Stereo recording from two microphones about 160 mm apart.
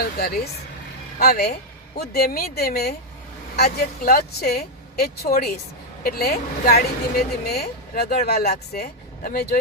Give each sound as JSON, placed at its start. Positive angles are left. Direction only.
{"t": 0.2, "sound": "a woman's voice", "side_deg": 75}